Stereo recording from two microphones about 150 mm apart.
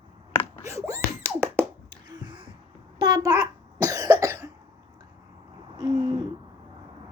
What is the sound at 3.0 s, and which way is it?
Cough, 25° right (ahead or behind).